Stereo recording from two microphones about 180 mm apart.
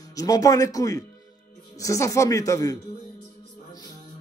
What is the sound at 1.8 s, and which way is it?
Speech, 15° left (ahead or behind).